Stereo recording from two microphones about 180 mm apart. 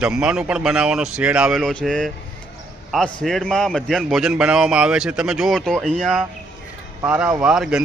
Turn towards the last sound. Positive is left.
turn(degrees=-5)  # may be behind; listen again after turning